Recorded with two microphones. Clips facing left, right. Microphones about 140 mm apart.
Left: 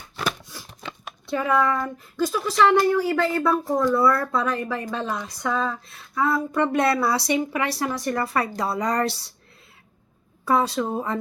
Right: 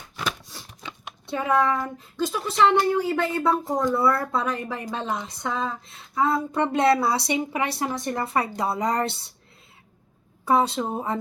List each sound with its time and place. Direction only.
0.5 s a sound: 30° right (ahead or behind)
1.3 s speech: 25° right (ahead or behind)
10.4 s speech: 25° right (ahead or behind)